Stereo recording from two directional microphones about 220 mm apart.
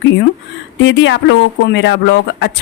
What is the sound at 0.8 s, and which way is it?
Speech, 55° left (ahead or behind).